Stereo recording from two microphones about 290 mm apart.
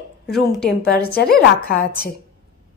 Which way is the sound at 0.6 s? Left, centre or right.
Left.